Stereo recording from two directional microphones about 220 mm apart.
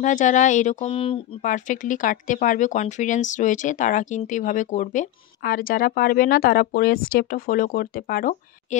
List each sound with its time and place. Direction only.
0.0 s speech: 35° left (ahead or behind)